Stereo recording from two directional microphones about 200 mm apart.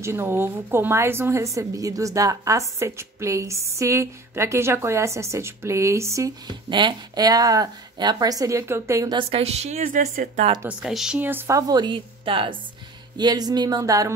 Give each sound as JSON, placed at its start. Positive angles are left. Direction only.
{"t": 0.0, "sound": "a woman's voice", "side_deg": -15}
{"t": 9.3, "sound": "a woman's voice", "side_deg": -30}
{"t": 10.7, "sound": "a woman's voice", "side_deg": 0}